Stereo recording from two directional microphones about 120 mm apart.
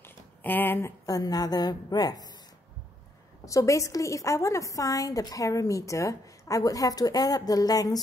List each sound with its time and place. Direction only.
0.4 s speech: 15° left (ahead or behind)
1.0 s a woman's voice: 30° left (ahead or behind)
3.4 s a woman's voice: 25° left (ahead or behind)